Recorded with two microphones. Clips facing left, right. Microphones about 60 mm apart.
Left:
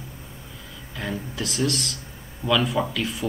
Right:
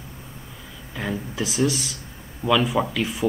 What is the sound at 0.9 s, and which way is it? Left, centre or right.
Speech, centre.